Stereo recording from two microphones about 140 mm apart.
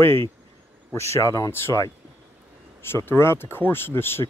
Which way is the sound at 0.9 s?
20° left (ahead or behind).